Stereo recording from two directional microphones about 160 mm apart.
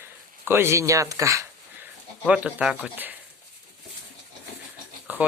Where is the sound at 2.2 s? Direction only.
5° right (ahead or behind).